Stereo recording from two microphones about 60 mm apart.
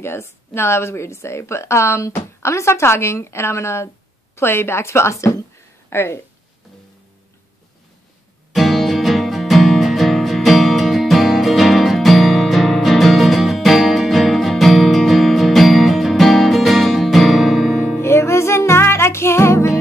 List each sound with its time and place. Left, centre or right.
0.0 s a woman's voice: left
5.9 s speech: left
8.5 s music: centre
17.7 s music: left